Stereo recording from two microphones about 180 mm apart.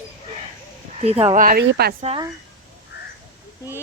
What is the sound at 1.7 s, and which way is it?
Speech, 60° right (ahead or behind).